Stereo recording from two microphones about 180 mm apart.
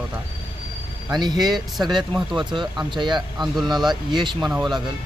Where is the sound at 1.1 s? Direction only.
25° right (ahead or behind).